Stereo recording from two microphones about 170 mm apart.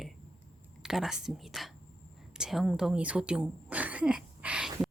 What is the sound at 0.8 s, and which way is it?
Speech, centre (ahead or behind).